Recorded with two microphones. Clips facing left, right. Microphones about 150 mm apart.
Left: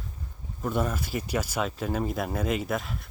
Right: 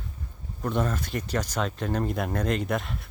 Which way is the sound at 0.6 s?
5° left (ahead or behind).